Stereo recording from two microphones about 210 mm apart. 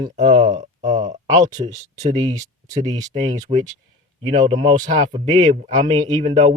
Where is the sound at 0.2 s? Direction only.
35° right (ahead or behind).